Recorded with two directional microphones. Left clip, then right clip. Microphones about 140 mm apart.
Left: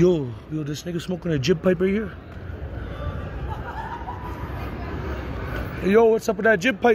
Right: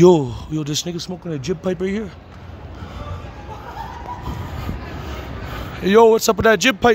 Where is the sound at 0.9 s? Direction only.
5° right (ahead or behind).